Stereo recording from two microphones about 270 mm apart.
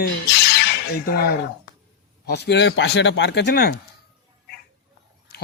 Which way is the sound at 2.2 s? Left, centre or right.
Left.